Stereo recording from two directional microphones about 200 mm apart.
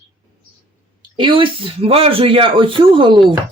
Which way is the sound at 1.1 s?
25° right (ahead or behind).